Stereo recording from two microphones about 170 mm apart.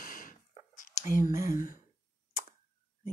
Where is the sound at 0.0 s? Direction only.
55° left (ahead or behind).